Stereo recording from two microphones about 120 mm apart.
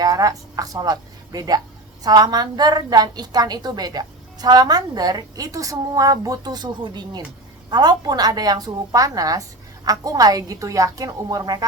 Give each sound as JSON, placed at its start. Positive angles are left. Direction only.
{"t": 0.0, "sound": "a woman's voice", "side_deg": -30}